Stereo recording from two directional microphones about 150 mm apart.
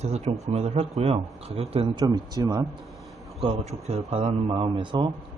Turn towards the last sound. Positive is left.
turn(degrees=-35)  # may be behind; listen again after turning